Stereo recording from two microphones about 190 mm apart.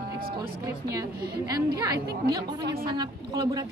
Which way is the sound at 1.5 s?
20° right (ahead or behind).